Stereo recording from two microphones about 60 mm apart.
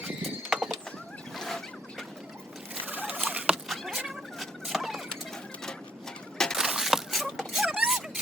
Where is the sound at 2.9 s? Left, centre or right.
Right.